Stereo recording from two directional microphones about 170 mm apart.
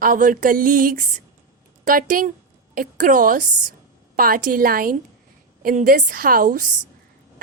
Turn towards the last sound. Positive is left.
turn(degrees=-50)  # may be behind; listen again after turning